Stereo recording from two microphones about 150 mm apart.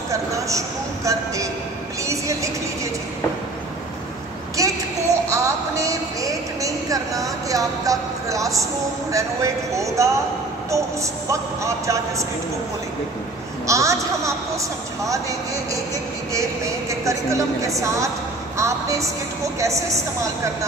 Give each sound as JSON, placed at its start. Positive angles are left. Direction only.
{"t": 0.1, "sound": "a woman's voice", "side_deg": -20}
{"t": 4.6, "sound": "child singing", "side_deg": -20}
{"t": 5.3, "sound": "a sound", "side_deg": -20}
{"t": 9.1, "sound": "a woman's voice", "side_deg": -20}
{"t": 13.7, "sound": "a woman's voice", "side_deg": -20}